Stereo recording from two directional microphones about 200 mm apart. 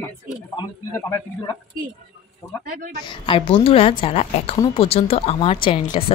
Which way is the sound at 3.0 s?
25° left (ahead or behind).